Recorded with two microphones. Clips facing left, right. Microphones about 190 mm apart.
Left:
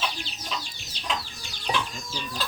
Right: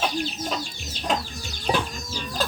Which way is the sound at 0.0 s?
50° right (ahead or behind).